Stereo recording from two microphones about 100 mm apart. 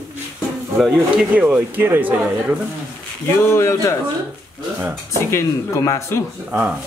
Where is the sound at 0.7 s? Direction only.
5° right (ahead or behind); by 2.2 s 20° right (ahead or behind).